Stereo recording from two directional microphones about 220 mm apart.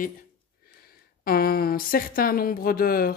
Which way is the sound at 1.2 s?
40° left (ahead or behind).